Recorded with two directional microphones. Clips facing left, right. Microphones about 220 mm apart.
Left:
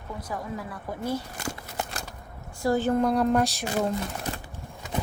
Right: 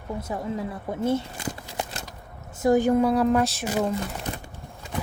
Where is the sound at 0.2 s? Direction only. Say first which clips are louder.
Right 4 dB; 25° right (ahead or behind).